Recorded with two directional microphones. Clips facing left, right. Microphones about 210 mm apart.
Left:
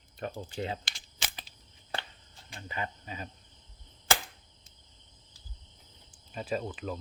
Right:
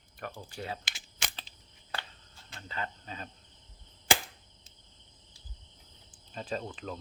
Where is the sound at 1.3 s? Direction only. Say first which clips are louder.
Left 1 dB; 15° left (ahead or behind).